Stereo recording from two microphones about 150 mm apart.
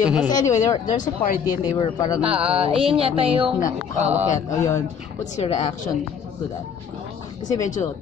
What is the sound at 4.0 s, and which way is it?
Speech, 50° right (ahead or behind).